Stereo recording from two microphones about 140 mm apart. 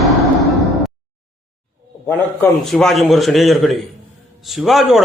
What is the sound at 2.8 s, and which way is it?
Speech, centre (ahead or behind).